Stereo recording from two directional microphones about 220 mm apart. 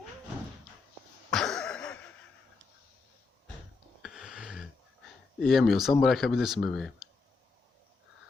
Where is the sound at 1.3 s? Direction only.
5° left (ahead or behind).